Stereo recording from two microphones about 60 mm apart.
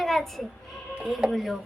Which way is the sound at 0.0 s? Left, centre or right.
Centre.